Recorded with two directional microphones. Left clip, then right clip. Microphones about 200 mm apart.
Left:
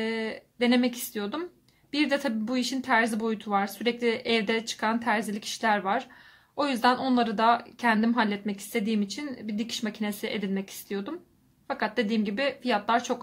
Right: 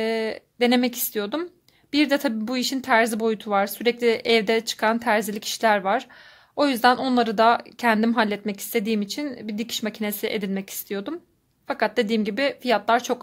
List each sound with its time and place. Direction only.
0.0 s speech: 50° right (ahead or behind)